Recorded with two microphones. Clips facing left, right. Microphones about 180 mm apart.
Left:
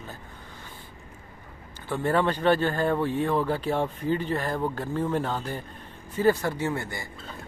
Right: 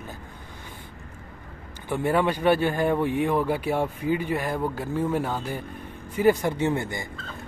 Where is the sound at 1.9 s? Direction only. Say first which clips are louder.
Right 1 dB; 10° right (ahead or behind).